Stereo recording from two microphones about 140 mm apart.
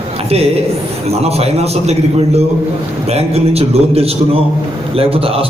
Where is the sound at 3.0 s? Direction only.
45° right (ahead or behind).